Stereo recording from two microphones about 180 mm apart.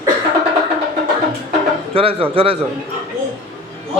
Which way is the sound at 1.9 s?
30° right (ahead or behind).